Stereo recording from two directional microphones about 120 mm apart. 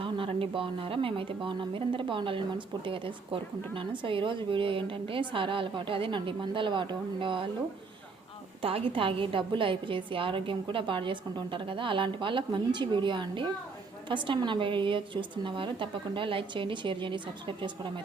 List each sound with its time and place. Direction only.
0.0 s a woman's voice: 45° right (ahead or behind)
8.6 s a woman's voice: 50° right (ahead or behind)